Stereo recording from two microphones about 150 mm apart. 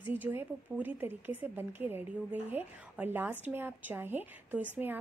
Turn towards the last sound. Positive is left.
turn(degrees=-10)  # may be behind; listen again after turning